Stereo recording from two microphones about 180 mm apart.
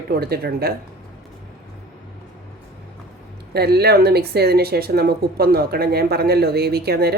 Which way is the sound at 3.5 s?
60° right (ahead or behind).